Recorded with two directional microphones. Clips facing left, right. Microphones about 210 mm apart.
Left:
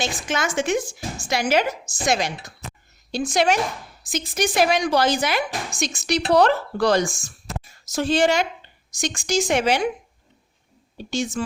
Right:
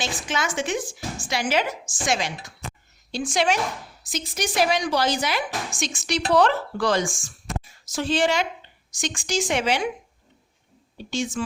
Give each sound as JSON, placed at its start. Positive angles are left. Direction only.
{"t": 0.0, "sound": "a woman's voice", "side_deg": 45}
{"t": 4.0, "sound": "a woman's voice", "side_deg": 50}
{"t": 5.7, "sound": "speech", "side_deg": 40}
{"t": 10.9, "sound": "speech", "side_deg": 40}